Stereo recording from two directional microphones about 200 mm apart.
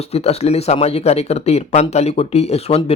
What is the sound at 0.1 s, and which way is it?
A man's voice, 30° left (ahead or behind).